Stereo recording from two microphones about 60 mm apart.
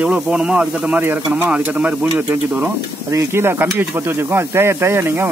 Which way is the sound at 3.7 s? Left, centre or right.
Right.